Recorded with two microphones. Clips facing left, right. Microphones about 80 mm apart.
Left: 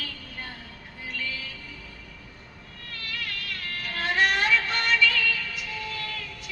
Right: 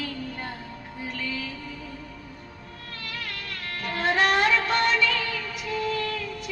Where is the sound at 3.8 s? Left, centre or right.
Right.